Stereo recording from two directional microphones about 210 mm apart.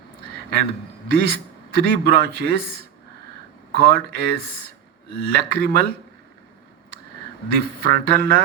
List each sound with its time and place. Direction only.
1.0 s a man's voice: 50° right (ahead or behind)
3.7 s a man's voice: 50° right (ahead or behind)
7.5 s a man's voice: 50° right (ahead or behind)